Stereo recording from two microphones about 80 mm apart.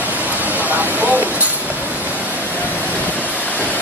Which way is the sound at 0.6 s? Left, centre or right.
Right.